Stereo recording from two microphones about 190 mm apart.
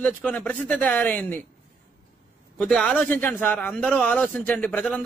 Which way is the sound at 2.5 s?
5° left (ahead or behind).